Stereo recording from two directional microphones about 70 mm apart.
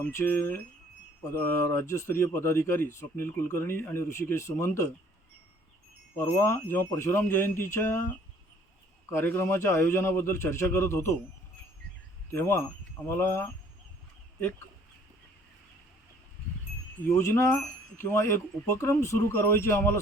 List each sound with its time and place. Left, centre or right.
0.2 s speech: left
6.1 s speech: left
9.2 s speech: left
12.3 s speech: left
17.2 s speech: left